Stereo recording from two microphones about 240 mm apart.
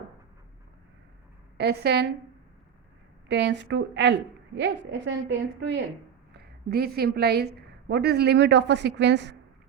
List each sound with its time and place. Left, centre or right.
1.5 s a woman's voice: right
3.2 s a woman's voice: right
6.3 s a woman's voice: right